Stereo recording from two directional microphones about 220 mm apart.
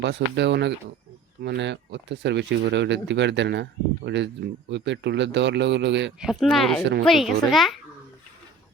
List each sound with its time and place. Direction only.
0.0 s speech: 50° right (ahead or behind)
6.1 s speech: centre (ahead or behind)